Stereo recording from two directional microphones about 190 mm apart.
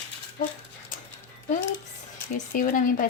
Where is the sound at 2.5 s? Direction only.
45° left (ahead or behind).